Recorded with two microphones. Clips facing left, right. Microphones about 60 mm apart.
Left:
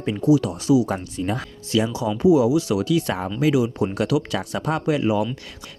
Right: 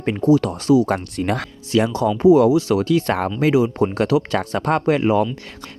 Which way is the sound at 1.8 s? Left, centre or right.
Right.